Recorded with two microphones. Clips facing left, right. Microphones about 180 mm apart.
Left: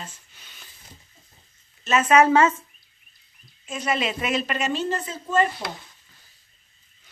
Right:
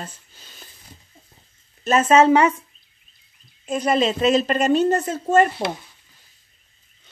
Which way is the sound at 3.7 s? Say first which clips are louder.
Right 7 dB; 35° right (ahead or behind).